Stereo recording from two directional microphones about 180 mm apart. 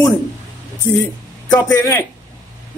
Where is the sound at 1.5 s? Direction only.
15° left (ahead or behind).